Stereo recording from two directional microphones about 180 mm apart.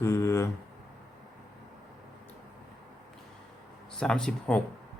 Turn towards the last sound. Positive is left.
turn(degrees=5)  # may be behind; listen again after turning